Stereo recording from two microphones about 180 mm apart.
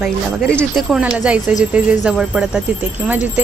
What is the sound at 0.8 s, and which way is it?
A woman's voice, 5° right (ahead or behind).